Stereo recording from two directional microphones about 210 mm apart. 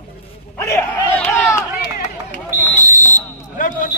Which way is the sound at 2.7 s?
35° left (ahead or behind).